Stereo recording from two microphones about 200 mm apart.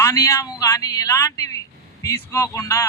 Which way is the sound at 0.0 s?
15° left (ahead or behind).